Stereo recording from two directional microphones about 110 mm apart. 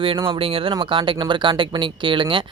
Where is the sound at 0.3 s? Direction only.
55° right (ahead or behind).